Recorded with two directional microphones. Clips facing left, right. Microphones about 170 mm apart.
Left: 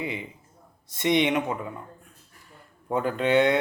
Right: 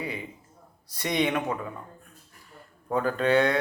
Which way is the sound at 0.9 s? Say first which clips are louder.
Left 4 dB; 20° left (ahead or behind).